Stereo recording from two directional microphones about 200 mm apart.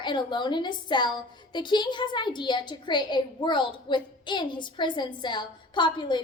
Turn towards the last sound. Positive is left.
turn(degrees=25)  # may be behind; listen again after turning